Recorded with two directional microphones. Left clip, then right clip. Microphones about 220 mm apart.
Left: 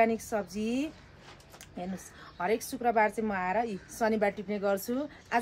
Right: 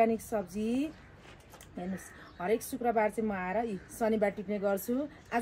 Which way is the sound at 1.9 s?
5° left (ahead or behind).